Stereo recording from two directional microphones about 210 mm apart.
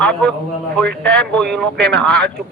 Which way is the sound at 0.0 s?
5° left (ahead or behind).